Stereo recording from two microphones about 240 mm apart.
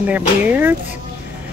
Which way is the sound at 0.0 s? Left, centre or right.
Centre.